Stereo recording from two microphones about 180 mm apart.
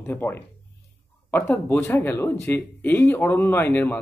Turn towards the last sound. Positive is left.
turn(degrees=10)  # may be behind; listen again after turning